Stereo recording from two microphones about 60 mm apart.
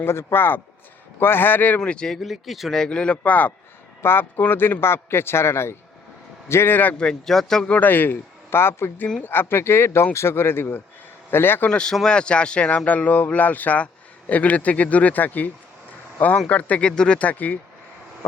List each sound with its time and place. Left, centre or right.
0.0 s speech: left
1.8 s speech: centre
2.1 s speech: centre
2.7 s speech: centre
4.0 s a man's voice: left
7.0 s speech: centre
7.7 s speech: left
11.7 s speech: centre